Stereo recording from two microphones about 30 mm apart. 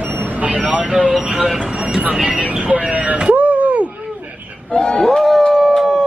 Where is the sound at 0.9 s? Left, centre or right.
Right.